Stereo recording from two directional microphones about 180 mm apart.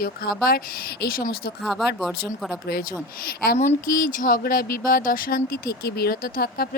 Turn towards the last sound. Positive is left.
turn(degrees=55)  # may be behind; listen again after turning